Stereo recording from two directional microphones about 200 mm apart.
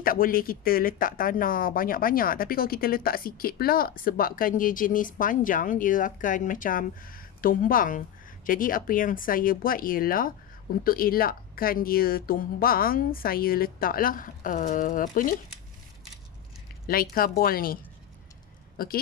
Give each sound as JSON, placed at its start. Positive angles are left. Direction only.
{"t": 0.0, "sound": "speech", "side_deg": 45}
{"t": 16.8, "sound": "speech", "side_deg": 45}